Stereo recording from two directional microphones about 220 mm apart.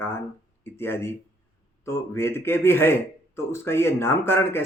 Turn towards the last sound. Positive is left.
turn(degrees=10)  # may be behind; listen again after turning